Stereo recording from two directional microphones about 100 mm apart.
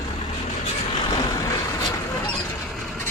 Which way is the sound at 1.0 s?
35° left (ahead or behind).